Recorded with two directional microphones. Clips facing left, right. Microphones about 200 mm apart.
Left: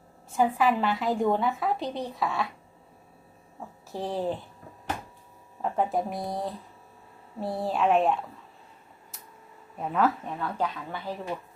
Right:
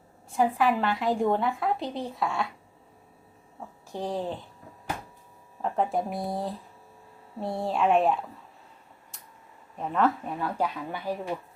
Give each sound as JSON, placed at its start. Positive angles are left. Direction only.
{"t": 0.3, "sound": "a woman's voice", "side_deg": 0}
{"t": 3.9, "sound": "a woman's voice", "side_deg": 5}
{"t": 5.7, "sound": "a woman's voice", "side_deg": 0}
{"t": 9.7, "sound": "a woman's voice", "side_deg": 5}
{"t": 10.2, "sound": "speech", "side_deg": -10}